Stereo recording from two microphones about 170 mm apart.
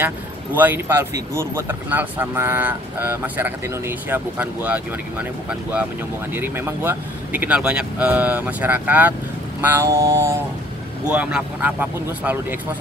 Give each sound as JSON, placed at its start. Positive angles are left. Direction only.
{"t": 0.0, "sound": "speech", "side_deg": -10}
{"t": 11.1, "sound": "speech", "side_deg": -5}